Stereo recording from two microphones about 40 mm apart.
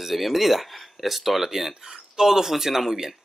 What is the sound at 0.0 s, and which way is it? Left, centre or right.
Speech, centre.